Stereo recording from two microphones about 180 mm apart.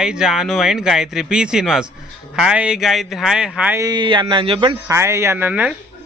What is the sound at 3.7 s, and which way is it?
A man's voice, 20° right (ahead or behind).